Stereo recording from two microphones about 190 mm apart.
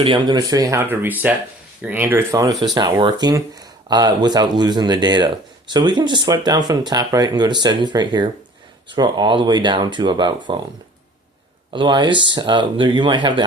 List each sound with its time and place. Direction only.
0.0 s speech: 25° right (ahead or behind)
11.7 s speech: 25° right (ahead or behind)